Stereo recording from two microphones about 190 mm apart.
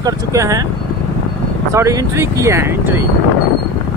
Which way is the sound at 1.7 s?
15° right (ahead or behind).